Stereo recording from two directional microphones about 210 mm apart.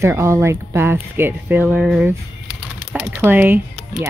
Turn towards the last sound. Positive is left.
turn(degrees=-10)  # may be behind; listen again after turning